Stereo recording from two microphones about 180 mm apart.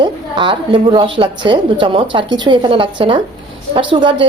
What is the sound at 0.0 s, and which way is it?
A woman's voice, 25° right (ahead or behind).